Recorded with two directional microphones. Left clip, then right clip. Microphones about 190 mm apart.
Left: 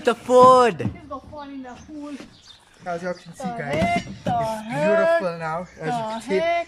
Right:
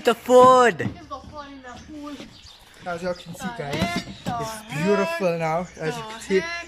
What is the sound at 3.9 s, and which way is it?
Music, 35° left (ahead or behind).